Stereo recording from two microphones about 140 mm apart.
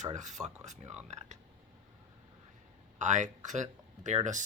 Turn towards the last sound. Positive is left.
turn(degrees=-60)  # may be behind; listen again after turning